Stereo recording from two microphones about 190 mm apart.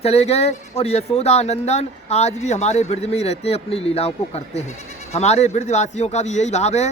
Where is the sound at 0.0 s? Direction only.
35° left (ahead or behind).